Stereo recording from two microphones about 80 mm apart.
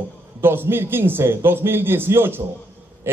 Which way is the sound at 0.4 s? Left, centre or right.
Right.